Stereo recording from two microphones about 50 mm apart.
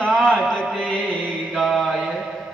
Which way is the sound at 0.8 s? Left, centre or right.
Centre.